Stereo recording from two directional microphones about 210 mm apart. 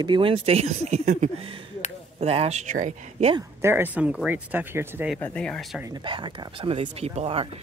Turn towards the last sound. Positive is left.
turn(degrees=-30)  # may be behind; listen again after turning